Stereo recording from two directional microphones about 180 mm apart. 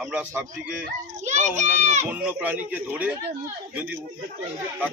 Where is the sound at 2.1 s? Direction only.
5° right (ahead or behind).